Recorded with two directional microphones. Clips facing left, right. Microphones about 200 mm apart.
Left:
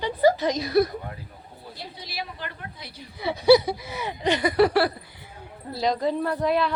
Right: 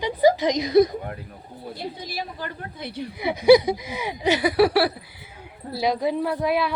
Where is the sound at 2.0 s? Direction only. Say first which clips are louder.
Right 3 dB; 45° right (ahead or behind).